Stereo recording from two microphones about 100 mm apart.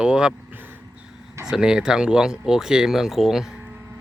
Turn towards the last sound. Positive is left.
turn(degrees=-5)  # may be behind; listen again after turning